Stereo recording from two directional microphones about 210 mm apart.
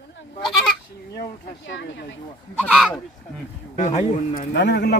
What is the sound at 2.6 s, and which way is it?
Speech, 5° left (ahead or behind).